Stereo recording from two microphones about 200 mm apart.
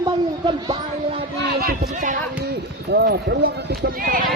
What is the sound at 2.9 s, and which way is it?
Speech, 55° right (ahead or behind).